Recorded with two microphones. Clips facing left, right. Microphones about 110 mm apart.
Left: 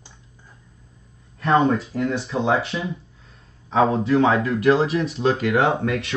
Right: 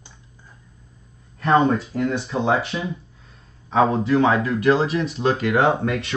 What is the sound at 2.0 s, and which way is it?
Speech, centre (ahead or behind).